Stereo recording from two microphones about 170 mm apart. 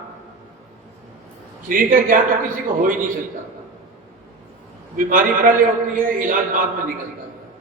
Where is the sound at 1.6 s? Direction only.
55° right (ahead or behind).